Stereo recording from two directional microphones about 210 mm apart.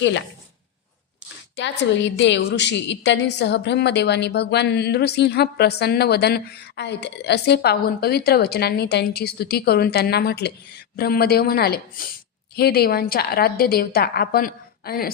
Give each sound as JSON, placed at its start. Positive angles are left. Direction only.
{"t": 0.0, "sound": "speech", "side_deg": 60}
{"t": 1.5, "sound": "a woman's voice", "side_deg": 60}